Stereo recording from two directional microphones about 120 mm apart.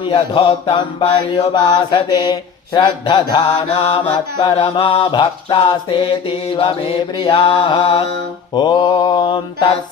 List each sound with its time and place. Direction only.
0.0 s mantra: 50° left (ahead or behind)
3.8 s mantra: 60° left (ahead or behind); by 9.8 s 40° left (ahead or behind)